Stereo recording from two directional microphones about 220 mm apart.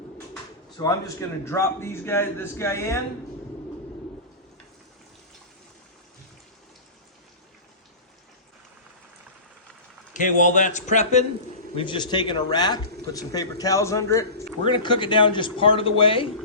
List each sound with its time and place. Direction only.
0.8 s a man's voice: 15° left (ahead or behind)
10.1 s a man's voice: 35° left (ahead or behind)